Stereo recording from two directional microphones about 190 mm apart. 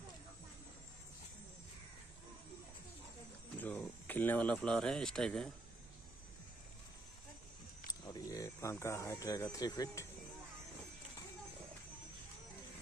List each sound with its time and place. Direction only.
3.5 s speech: 10° left (ahead or behind)
7.9 s speech: 20° left (ahead or behind)